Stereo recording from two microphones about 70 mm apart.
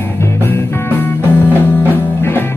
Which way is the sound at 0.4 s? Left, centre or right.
Left.